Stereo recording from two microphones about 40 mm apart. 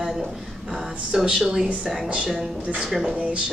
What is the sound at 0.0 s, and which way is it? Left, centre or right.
Speech, centre.